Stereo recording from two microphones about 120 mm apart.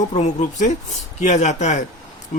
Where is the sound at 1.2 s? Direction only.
75° left (ahead or behind).